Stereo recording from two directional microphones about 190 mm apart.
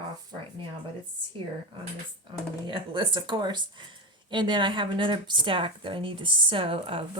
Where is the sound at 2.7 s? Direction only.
25° right (ahead or behind).